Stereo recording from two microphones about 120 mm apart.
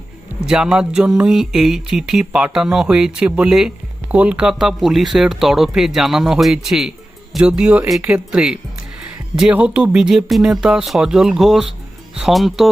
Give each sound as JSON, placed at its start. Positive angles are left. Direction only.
{"t": 0.4, "sound": "speech", "side_deg": -5}